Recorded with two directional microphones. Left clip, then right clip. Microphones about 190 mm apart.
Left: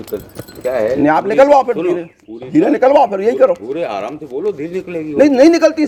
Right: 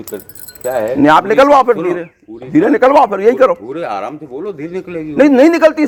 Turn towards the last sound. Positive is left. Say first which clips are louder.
# right 1 dB
turn(degrees=-35)  # may be behind; listen again after turning